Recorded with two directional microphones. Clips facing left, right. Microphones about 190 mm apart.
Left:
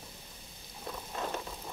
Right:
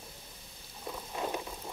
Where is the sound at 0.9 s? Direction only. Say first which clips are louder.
Right 1 dB; 15° right (ahead or behind).